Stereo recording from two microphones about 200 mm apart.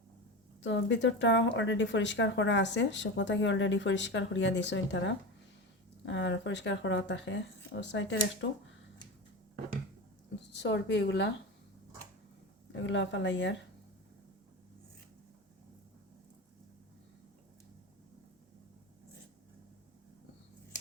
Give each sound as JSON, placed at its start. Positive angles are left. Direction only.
{"t": 0.6, "sound": "speech", "side_deg": 65}
{"t": 10.5, "sound": "speech", "side_deg": 60}
{"t": 12.7, "sound": "speech", "side_deg": 65}